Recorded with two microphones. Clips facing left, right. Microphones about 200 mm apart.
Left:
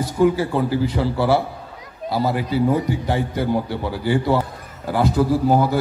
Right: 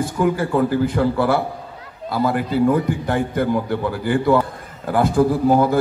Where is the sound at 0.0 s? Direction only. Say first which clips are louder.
Left 2 dB; 55° right (ahead or behind).